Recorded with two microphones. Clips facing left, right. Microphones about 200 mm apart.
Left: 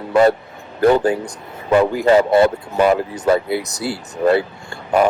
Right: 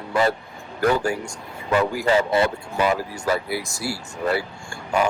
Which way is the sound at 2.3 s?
50° left (ahead or behind).